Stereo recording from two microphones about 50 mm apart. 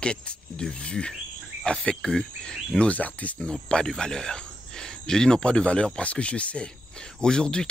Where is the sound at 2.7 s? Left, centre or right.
Left.